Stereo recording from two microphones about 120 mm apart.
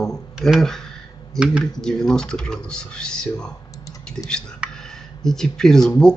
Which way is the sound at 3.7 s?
30° left (ahead or behind).